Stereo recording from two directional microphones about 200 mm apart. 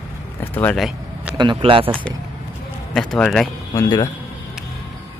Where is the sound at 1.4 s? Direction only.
25° right (ahead or behind).